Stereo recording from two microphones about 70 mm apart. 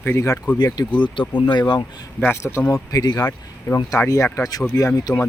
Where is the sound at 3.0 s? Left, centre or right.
Left.